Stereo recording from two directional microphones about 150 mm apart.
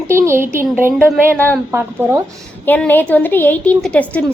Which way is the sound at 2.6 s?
10° left (ahead or behind).